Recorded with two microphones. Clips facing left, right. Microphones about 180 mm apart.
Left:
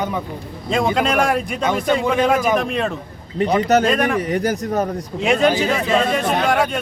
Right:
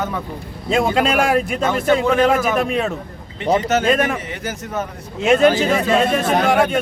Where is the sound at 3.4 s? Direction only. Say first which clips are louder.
Even; 40° left (ahead or behind).